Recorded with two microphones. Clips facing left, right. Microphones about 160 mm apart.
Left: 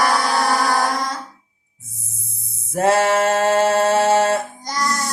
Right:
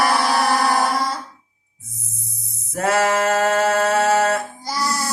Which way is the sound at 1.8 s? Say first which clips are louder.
Right 3 dB; 30° left (ahead or behind).